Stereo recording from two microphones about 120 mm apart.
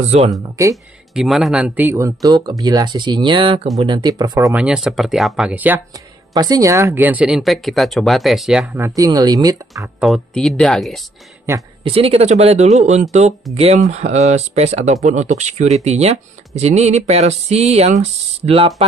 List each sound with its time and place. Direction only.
0.6 s speech: 25° right (ahead or behind)
1.1 s speech: centre (ahead or behind)
1.9 s speech: 25° right (ahead or behind); by 4.1 s 45° right (ahead or behind)
4.1 s speech: 30° right (ahead or behind)
4.6 s speech: 5° right (ahead or behind)
6.3 s speech: 30° right (ahead or behind); by 7.2 s 15° right (ahead or behind)
7.2 s speech: centre (ahead or behind)
8.7 s speech: 25° right (ahead or behind)
9.9 s speech: centre (ahead or behind)
11.8 s speech: 50° right (ahead or behind)
15.0 s speech: 75° right (ahead or behind); by 18.7 s 55° right (ahead or behind)